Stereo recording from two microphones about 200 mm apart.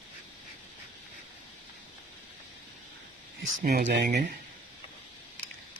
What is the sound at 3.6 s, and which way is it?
Speech, 50° right (ahead or behind).